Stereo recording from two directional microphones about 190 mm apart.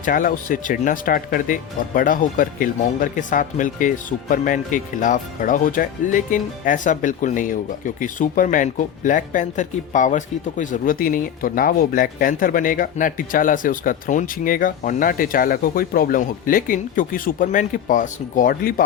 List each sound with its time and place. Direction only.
0.0 s speech: 45° left (ahead or behind)